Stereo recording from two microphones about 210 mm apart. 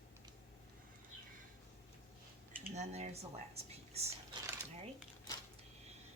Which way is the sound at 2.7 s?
30° right (ahead or behind).